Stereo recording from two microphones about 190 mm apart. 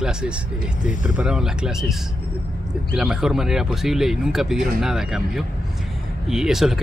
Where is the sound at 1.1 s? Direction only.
5° right (ahead or behind).